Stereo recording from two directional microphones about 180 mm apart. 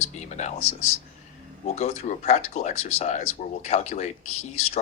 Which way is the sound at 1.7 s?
35° left (ahead or behind).